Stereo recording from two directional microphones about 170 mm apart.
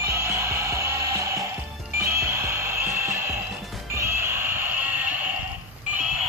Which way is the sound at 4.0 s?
15° right (ahead or behind).